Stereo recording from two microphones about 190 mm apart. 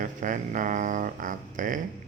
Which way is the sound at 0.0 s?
45° right (ahead or behind).